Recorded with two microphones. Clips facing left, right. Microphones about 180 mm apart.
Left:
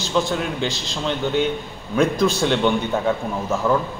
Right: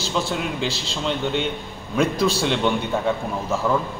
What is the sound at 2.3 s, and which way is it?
Speech, centre (ahead or behind).